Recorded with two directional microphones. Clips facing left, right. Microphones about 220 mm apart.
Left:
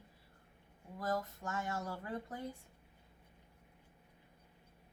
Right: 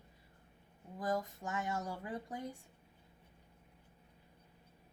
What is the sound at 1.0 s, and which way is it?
Speech, 15° right (ahead or behind).